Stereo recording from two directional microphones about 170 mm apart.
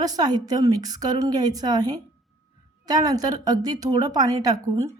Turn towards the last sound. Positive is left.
turn(degrees=-20)  # may be behind; listen again after turning